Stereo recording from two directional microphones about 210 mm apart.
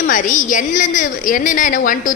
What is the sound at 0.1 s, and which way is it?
A woman's voice, 40° left (ahead or behind).